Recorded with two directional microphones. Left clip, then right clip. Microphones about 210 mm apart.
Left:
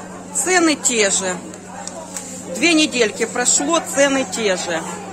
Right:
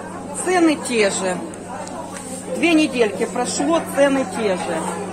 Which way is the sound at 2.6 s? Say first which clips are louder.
Left 1 dB; 30° left (ahead or behind).